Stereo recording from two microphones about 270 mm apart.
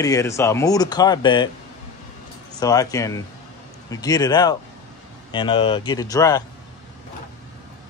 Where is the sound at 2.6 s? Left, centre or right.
Centre.